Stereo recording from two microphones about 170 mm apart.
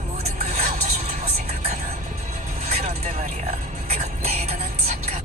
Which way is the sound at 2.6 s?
40° right (ahead or behind).